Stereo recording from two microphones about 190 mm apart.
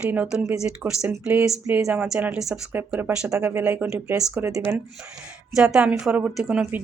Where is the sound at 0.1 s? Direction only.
5° right (ahead or behind).